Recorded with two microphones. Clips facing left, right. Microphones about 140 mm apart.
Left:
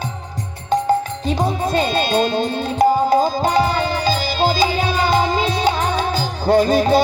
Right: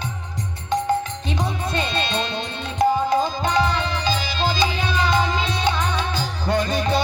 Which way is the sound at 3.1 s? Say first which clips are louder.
Left 5 dB; 30° left (ahead or behind).